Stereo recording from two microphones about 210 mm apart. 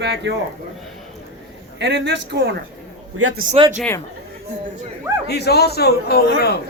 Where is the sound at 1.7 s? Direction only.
55° right (ahead or behind).